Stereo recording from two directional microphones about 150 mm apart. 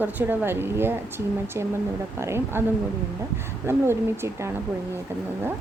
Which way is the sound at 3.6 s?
15° right (ahead or behind).